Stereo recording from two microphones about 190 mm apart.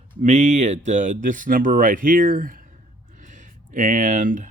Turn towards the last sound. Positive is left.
turn(degrees=-45)  # may be behind; listen again after turning